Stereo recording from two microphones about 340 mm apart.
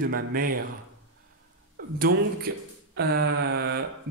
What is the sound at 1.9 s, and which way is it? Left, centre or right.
Mantra, right.